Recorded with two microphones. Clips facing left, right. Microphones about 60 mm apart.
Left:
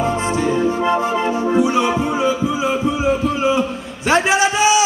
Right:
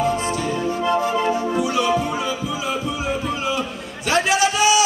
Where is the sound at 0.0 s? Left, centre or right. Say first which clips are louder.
Left 3 dB; left.